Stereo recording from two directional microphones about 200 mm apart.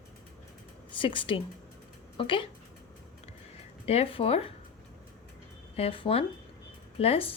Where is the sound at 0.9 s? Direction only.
25° left (ahead or behind).